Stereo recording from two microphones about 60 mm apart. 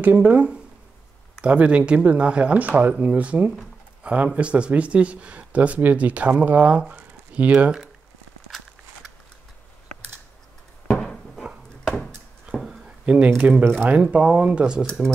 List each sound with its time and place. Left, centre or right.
0.0 s speech: right
12.5 s a sound: centre
13.0 s speech: centre